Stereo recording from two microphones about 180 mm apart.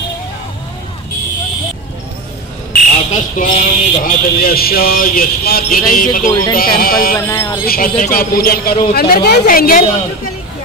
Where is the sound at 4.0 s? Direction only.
55° left (ahead or behind).